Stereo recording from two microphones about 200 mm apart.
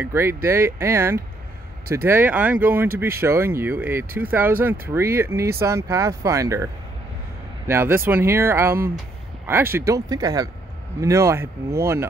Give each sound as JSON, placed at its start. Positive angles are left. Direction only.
{"t": 0.0, "sound": "speech", "side_deg": -15}